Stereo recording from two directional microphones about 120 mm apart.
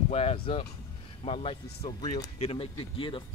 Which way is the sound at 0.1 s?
60° left (ahead or behind).